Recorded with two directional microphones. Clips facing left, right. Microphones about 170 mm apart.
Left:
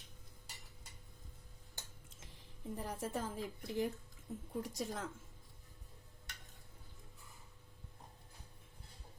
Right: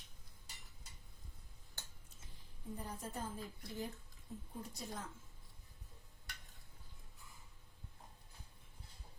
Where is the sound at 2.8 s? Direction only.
90° left.